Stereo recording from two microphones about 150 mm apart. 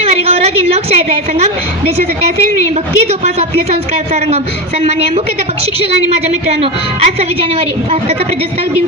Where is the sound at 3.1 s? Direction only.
45° right (ahead or behind).